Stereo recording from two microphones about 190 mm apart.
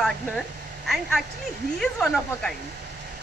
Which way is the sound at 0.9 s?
Centre (ahead or behind).